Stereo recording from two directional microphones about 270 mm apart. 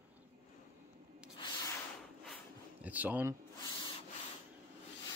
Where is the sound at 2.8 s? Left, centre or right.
Centre.